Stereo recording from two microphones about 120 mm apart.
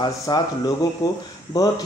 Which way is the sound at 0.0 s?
35° left (ahead or behind).